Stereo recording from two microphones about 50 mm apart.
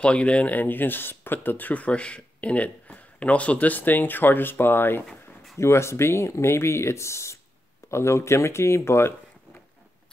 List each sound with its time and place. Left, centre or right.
0.0 s speech: left
5.6 s speech: left